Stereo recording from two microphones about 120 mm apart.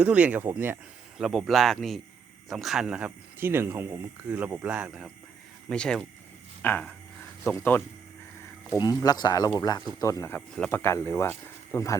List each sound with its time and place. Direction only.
0.0 s speech: 10° right (ahead or behind)
1.2 s speech: centre (ahead or behind)
3.3 s speech: 20° right (ahead or behind)
5.6 s speech: 5° left (ahead or behind)
8.7 s speech: 30° left (ahead or behind)
10.3 s speech: 5° left (ahead or behind)
10.7 s speech: 20° left (ahead or behind)